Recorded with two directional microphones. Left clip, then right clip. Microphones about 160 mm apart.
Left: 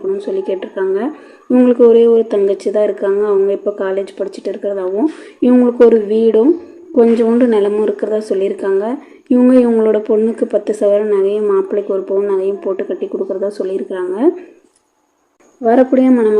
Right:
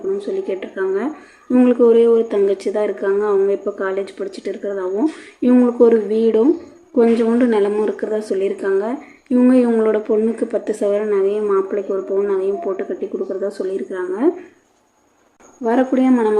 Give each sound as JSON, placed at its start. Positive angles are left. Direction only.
{"t": 0.2, "sound": "a woman's voice", "side_deg": 20}
{"t": 15.6, "sound": "a woman's voice", "side_deg": 35}